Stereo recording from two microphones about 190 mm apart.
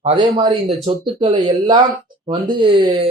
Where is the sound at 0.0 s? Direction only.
25° right (ahead or behind).